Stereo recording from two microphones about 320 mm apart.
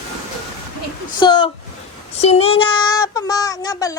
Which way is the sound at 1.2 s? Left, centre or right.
Centre.